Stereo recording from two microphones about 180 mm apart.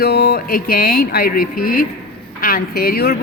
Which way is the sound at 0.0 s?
65° left (ahead or behind).